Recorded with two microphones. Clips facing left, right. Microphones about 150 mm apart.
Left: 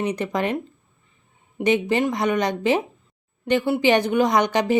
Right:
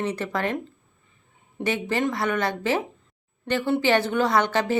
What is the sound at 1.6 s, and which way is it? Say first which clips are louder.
A woman's voice: left 5 dB; 15° left (ahead or behind).